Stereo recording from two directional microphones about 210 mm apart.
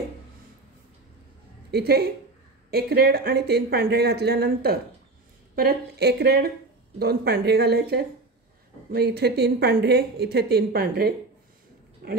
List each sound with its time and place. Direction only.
1.7 s speech: 50° right (ahead or behind)